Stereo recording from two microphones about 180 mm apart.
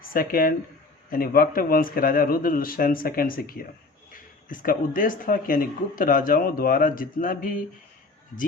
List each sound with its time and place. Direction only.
0.0 s speech: 55° left (ahead or behind)